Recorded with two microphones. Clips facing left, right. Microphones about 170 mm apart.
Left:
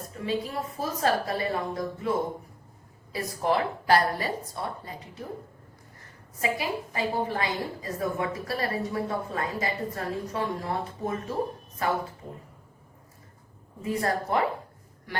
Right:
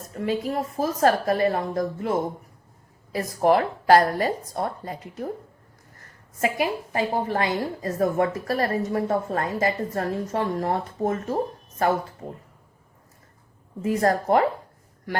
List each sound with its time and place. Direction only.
0.3 s a woman's voice: 50° right (ahead or behind)
6.4 s a woman's voice: 50° right (ahead or behind)
13.8 s a woman's voice: 45° right (ahead or behind)